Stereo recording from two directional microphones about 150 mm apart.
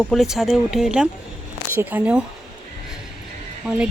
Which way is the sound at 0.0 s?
Centre (ahead or behind).